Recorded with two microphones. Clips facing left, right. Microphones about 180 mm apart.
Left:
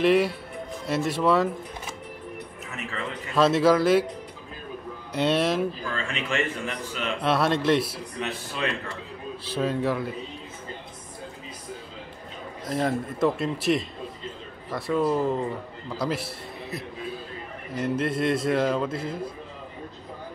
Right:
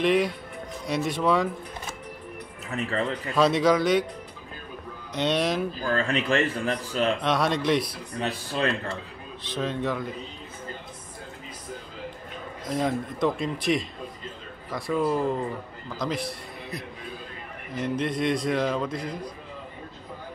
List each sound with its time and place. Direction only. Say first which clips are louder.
0.0 s a man's voice: left 2 dB; 5° left (ahead or behind)
2.7 s speech: right 7 dB; 35° right (ahead or behind)
3.3 s a man's voice: left 2 dB; 5° left (ahead or behind)
5.1 s a man's voice: left 2 dB; 5° left (ahead or behind)
5.9 s speech: right 6 dB; 40° right (ahead or behind)
7.2 s a man's voice: left 1 dB; 5° left (ahead or behind)
8.2 s speech: right 3 dB; 35° right (ahead or behind)
9.5 s a man's voice: left 3 dB; 10° left (ahead or behind)
12.6 s a man's voice: left 1 dB; centre (ahead or behind)